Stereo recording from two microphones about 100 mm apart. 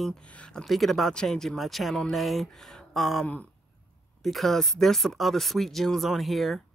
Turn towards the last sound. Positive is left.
turn(degrees=0)  # may be behind; listen again after turning